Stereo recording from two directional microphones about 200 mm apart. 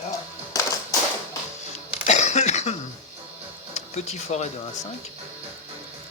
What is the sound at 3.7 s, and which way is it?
Speech, 35° left (ahead or behind).